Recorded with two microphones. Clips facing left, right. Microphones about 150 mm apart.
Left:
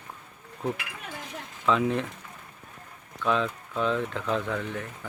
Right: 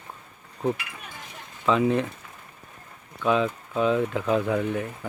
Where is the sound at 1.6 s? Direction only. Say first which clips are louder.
Right 3 dB; centre (ahead or behind).